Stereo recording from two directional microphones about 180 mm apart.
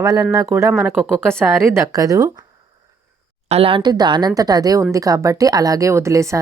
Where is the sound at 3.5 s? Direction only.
30° right (ahead or behind).